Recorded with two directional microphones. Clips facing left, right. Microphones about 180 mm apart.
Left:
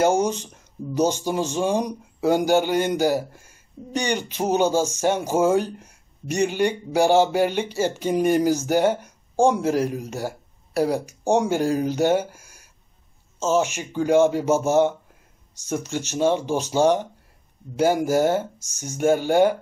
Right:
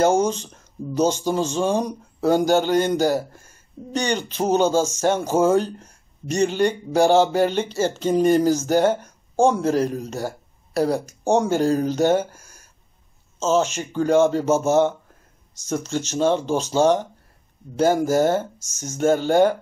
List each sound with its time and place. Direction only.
0.0 s a sound: 15° left (ahead or behind)
0.9 s a man's voice: 15° left (ahead or behind)
13.4 s a man's voice: 15° left (ahead or behind)